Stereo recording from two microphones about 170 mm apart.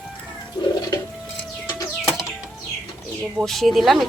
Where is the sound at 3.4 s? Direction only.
Centre (ahead or behind).